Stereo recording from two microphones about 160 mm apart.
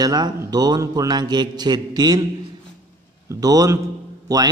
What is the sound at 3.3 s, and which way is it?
A man's voice, 20° right (ahead or behind).